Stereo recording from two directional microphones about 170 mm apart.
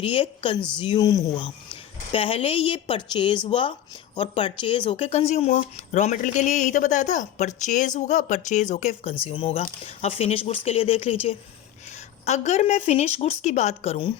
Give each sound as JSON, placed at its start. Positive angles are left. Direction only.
{"t": 0.0, "sound": "a woman's voice", "side_deg": 35}
{"t": 1.7, "sound": "a woman's voice", "side_deg": 35}
{"t": 9.2, "sound": "a woman's voice", "side_deg": 30}